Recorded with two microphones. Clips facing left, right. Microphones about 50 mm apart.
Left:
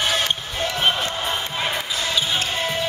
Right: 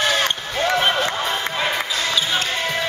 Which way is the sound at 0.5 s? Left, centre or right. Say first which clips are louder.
Right 6 dB; right.